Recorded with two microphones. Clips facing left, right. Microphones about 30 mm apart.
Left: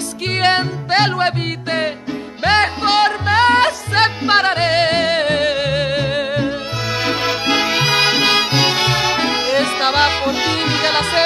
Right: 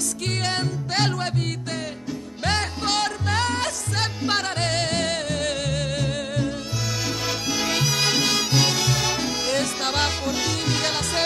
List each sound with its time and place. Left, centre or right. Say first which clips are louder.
0.4 s music: left 12 dB; left